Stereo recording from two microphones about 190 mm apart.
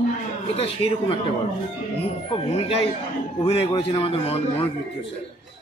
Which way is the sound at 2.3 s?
30° left (ahead or behind).